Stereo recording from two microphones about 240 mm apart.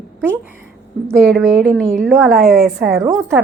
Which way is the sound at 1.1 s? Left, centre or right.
Centre.